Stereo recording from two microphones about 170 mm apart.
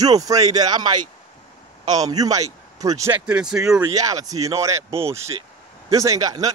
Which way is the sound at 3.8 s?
20° right (ahead or behind).